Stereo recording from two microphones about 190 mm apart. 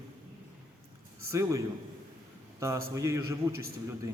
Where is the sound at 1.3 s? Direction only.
15° right (ahead or behind).